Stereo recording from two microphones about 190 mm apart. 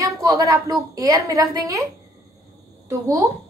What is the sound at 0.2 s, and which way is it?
A woman's voice, 20° right (ahead or behind).